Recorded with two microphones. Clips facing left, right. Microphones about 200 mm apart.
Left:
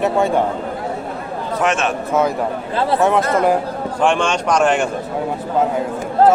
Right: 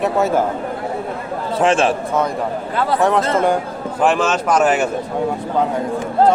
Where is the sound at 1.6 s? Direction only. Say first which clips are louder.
Right 4 dB; 30° right (ahead or behind).